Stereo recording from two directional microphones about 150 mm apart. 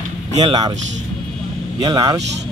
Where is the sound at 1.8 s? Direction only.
25° right (ahead or behind).